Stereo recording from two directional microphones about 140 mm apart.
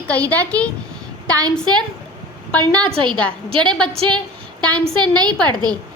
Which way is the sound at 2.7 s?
10° left (ahead or behind).